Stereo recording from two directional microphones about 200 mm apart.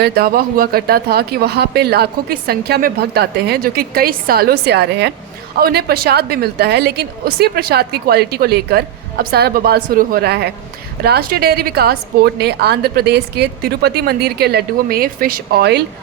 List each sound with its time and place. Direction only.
0.0 s speech: 50° right (ahead or behind)